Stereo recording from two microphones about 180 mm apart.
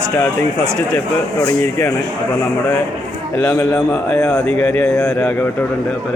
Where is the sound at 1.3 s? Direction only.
15° left (ahead or behind).